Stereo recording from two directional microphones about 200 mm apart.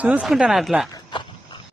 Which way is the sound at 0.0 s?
5° right (ahead or behind).